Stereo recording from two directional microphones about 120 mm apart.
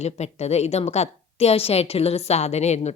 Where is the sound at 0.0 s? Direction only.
65° left (ahead or behind).